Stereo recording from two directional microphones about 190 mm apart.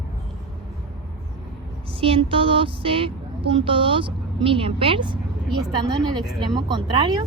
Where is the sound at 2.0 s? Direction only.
30° right (ahead or behind).